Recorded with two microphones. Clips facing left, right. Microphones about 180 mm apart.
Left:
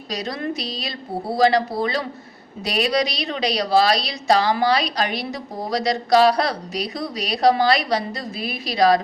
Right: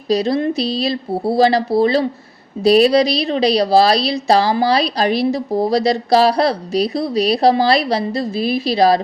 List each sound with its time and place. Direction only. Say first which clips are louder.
0.1 s a woman's voice: right 10 dB; 30° right (ahead or behind)